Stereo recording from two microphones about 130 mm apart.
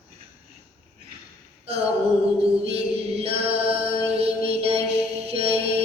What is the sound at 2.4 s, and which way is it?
Mantra, 50° right (ahead or behind).